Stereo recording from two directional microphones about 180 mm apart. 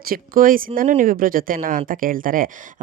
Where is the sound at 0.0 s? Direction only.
55° right (ahead or behind).